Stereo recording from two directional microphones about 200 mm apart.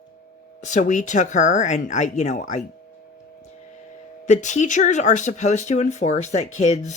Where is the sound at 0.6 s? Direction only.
40° left (ahead or behind).